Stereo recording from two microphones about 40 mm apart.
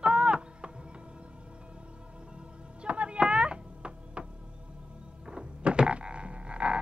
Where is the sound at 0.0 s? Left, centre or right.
Right.